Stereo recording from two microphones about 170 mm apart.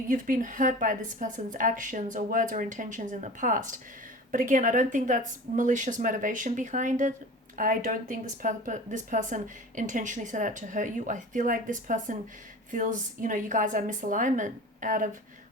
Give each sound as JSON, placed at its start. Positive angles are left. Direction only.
{"t": 0.1, "sound": "speech", "side_deg": -50}